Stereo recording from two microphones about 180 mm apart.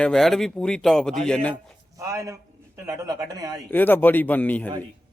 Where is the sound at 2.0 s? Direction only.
15° right (ahead or behind).